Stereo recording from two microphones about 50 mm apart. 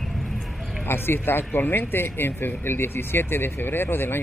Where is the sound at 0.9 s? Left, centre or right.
Left.